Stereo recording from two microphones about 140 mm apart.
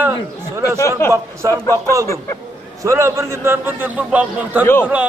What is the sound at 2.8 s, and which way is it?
A man's voice, 20° right (ahead or behind).